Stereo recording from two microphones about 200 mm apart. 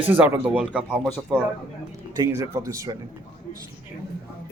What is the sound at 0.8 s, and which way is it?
Speech, 10° left (ahead or behind).